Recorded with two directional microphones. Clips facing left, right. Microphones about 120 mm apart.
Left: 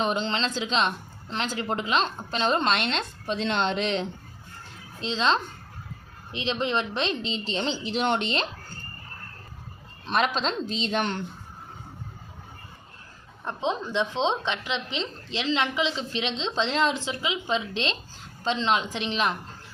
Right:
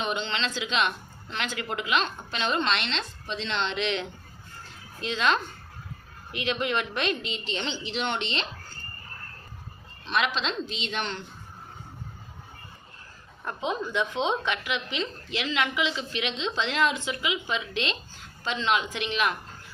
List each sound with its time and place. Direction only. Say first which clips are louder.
0.0 s a woman's voice: left 4 dB; 35° left (ahead or behind)
10.1 s speech: left 2 dB; 40° left (ahead or behind)
13.4 s a woman's voice: left 2 dB; 25° left (ahead or behind)